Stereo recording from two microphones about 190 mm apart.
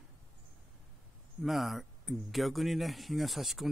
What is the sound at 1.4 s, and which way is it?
Speech, centre (ahead or behind).